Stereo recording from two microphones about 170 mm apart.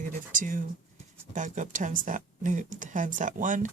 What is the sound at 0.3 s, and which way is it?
Speech, 50° right (ahead or behind).